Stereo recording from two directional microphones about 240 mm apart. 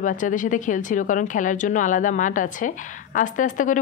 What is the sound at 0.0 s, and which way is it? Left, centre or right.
Speech, left.